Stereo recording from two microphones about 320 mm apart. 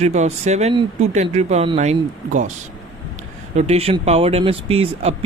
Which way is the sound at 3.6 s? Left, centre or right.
Centre.